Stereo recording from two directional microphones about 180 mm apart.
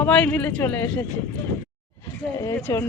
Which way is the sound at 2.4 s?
15° left (ahead or behind).